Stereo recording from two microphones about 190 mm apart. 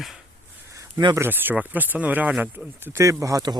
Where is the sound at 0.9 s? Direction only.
20° right (ahead or behind).